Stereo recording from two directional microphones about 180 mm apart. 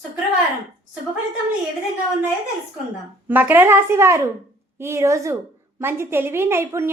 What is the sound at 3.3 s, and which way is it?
A woman's voice, 10° right (ahead or behind).